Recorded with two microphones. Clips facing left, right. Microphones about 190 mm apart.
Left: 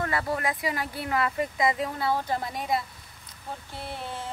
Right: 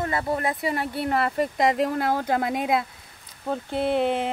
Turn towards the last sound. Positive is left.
turn(degrees=-80)